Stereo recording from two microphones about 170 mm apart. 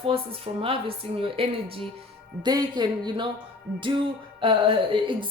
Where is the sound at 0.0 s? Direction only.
30° right (ahead or behind).